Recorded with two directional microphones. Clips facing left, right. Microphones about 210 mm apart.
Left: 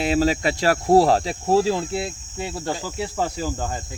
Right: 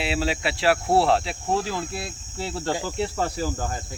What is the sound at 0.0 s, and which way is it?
Speech, 45° left (ahead or behind).